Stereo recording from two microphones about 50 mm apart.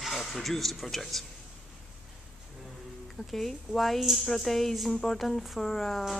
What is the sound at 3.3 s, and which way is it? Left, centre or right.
A man's voice, centre.